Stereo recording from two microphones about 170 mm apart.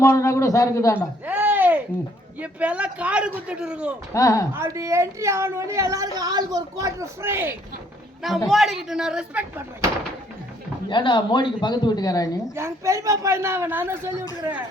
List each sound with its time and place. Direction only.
0.0 s a man's voice: 15° left (ahead or behind)
1.2 s a sound: 10° right (ahead or behind)
2.4 s speech: 10° right (ahead or behind)
4.1 s a man's voice: 20° left (ahead or behind)
4.5 s speech: 15° right (ahead or behind)
8.4 s a woman's voice: centre (ahead or behind)
10.8 s a man's voice: 30° left (ahead or behind)
12.5 s speech: 15° right (ahead or behind)